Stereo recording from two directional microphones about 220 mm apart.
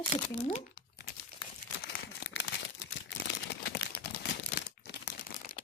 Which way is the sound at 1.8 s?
50° left (ahead or behind).